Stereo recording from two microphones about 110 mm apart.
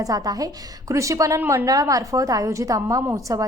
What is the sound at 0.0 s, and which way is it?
A woman's voice, 30° right (ahead or behind).